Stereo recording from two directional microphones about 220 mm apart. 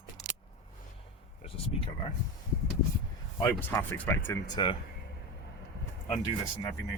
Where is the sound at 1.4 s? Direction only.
25° left (ahead or behind).